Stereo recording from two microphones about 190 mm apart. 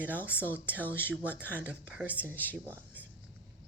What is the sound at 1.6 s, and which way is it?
Speech, 5° right (ahead or behind).